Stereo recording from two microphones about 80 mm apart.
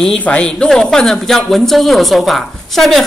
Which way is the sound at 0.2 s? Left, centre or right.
Centre.